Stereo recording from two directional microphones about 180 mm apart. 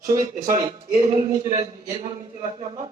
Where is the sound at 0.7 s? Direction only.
25° right (ahead or behind).